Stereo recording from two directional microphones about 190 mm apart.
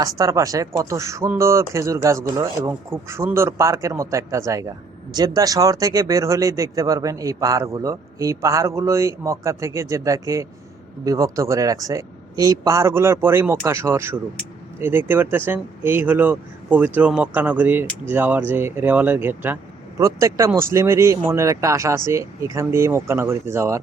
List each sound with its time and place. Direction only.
0.0 s speech: 15° right (ahead or behind)